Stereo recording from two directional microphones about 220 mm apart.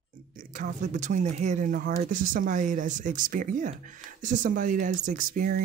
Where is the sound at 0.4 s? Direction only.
35° right (ahead or behind).